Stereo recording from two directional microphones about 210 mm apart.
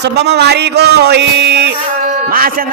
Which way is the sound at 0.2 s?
50° right (ahead or behind).